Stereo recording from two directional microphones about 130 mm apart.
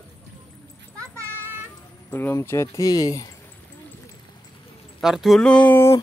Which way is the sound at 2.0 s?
15° left (ahead or behind).